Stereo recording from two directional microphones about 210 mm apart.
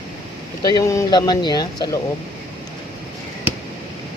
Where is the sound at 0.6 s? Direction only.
15° left (ahead or behind).